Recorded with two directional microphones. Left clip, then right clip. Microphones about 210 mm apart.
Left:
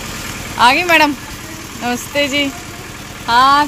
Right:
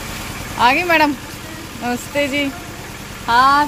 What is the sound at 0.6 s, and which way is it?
A woman's voice, centre (ahead or behind).